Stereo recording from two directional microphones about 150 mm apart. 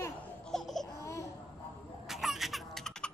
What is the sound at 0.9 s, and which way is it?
Baby cry, 20° left (ahead or behind).